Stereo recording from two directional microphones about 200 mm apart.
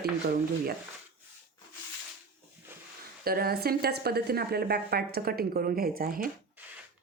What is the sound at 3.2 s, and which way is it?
Speech, 50° right (ahead or behind).